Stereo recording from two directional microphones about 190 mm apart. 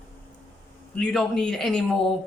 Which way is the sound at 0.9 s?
5° left (ahead or behind).